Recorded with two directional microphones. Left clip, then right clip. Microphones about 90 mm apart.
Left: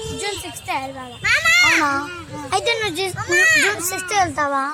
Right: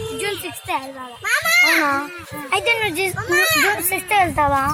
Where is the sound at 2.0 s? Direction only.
30° left (ahead or behind).